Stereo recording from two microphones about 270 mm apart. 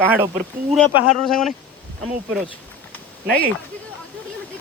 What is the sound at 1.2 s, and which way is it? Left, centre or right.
Speech, centre.